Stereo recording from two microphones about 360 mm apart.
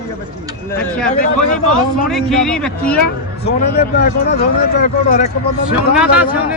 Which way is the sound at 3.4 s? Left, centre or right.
Left.